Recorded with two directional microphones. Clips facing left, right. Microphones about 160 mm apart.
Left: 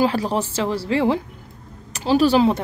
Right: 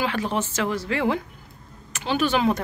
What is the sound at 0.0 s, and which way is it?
Speech, 35° left (ahead or behind).